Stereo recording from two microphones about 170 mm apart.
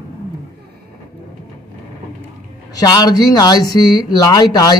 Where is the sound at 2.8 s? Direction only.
25° left (ahead or behind).